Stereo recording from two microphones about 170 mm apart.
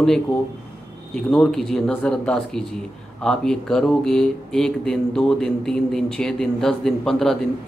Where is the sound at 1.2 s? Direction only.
5° left (ahead or behind).